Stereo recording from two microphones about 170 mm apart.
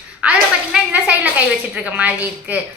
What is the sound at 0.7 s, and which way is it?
A woman's voice, 10° right (ahead or behind).